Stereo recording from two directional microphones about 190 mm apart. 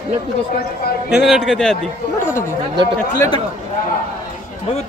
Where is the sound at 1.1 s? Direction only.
Centre (ahead or behind).